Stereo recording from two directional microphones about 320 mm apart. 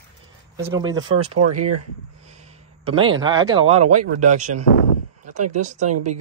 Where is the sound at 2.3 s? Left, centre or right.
Right.